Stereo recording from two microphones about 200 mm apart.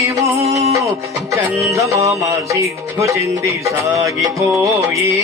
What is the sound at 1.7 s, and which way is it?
Music, 15° right (ahead or behind).